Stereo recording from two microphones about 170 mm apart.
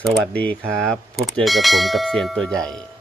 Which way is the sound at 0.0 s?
5° left (ahead or behind).